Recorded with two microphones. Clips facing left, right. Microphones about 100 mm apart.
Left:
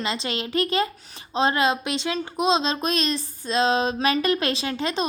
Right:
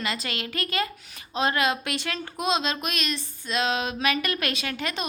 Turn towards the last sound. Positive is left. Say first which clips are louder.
# left 5 dB
turn(degrees=30)  # may be behind; listen again after turning